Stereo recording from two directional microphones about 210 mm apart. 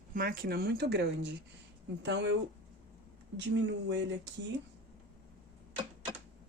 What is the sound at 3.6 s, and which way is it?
Speech, 55° right (ahead or behind).